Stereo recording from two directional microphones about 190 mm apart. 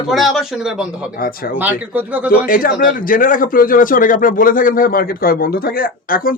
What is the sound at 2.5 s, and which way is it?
A man's voice, 50° left (ahead or behind).